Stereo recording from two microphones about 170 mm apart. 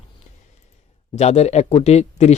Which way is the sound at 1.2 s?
40° left (ahead or behind).